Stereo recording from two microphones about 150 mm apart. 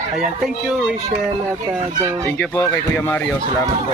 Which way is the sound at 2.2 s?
15° left (ahead or behind).